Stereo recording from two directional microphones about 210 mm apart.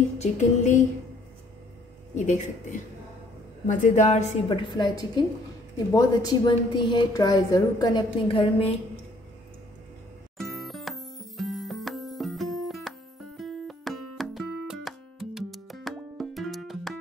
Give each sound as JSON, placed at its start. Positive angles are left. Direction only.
{"t": 0.2, "sound": "a woman's voice", "side_deg": 35}
{"t": 2.1, "sound": "a woman's voice", "side_deg": 35}
{"t": 10.3, "sound": "music", "side_deg": 0}